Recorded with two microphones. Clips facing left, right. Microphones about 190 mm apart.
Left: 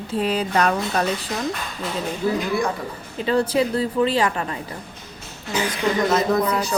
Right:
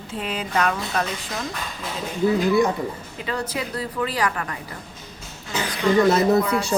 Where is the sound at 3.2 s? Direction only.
30° left (ahead or behind).